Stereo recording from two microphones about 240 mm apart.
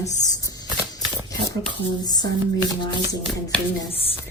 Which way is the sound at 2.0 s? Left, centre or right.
Centre.